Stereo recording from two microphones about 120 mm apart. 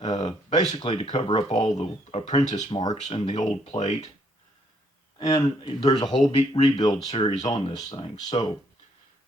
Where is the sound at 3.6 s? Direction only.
70° left (ahead or behind).